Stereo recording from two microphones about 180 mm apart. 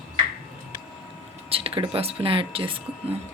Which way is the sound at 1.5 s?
30° right (ahead or behind).